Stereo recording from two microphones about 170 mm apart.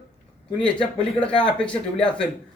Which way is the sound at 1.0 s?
5° left (ahead or behind).